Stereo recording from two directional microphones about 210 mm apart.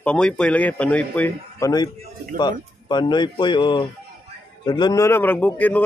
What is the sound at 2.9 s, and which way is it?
A man's voice, 20° left (ahead or behind).